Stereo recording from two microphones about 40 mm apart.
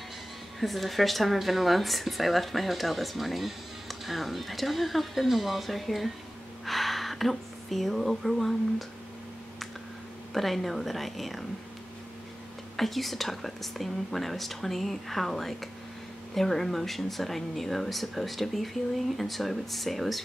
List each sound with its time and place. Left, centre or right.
0.6 s speech: centre
10.3 s speech: centre
12.7 s speech: centre